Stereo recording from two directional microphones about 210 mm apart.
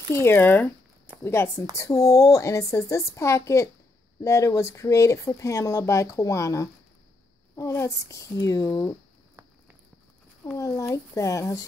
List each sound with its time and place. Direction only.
0.1 s speech: 10° left (ahead or behind)
10.4 s speech: 15° left (ahead or behind)